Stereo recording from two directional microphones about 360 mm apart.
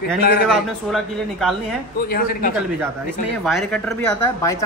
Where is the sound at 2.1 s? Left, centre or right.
Left.